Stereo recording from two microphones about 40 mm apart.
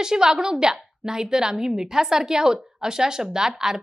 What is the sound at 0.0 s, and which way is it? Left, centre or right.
A woman's voice, centre.